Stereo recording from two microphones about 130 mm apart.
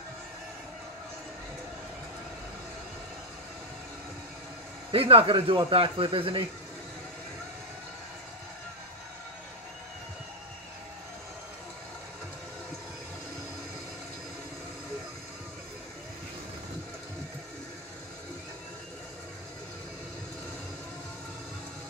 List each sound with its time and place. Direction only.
4.9 s speech: 45° right (ahead or behind)